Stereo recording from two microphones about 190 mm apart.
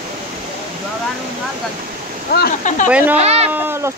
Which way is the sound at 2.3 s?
55° left (ahead or behind).